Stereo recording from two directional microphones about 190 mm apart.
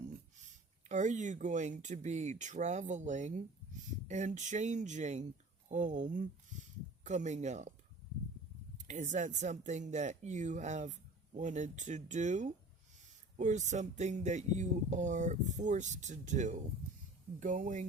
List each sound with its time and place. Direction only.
0.4 s speech: 40° right (ahead or behind)
8.9 s speech: 40° right (ahead or behind)